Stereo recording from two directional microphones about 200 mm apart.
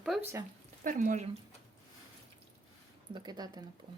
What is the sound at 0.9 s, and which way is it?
Speech, 40° right (ahead or behind).